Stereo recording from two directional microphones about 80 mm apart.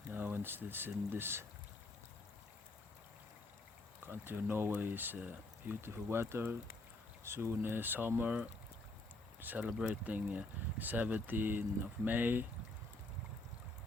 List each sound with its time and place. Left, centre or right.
0.1 s speech: right
4.0 s speech: right
9.4 s speech: right